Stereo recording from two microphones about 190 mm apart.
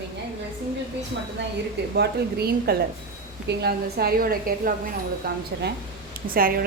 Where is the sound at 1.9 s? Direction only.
55° right (ahead or behind).